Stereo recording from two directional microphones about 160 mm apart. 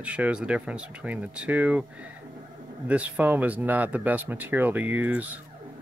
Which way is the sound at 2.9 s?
10° right (ahead or behind).